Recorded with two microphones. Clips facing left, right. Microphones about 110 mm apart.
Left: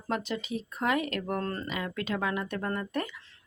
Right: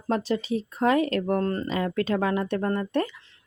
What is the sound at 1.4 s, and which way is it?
Speech, 20° right (ahead or behind).